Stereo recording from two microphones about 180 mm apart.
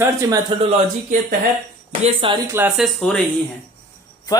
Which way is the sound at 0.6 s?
40° right (ahead or behind).